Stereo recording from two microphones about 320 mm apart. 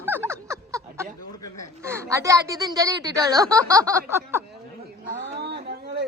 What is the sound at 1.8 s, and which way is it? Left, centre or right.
Speech, centre.